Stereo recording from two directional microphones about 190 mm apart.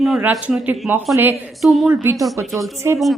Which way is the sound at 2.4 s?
Centre (ahead or behind).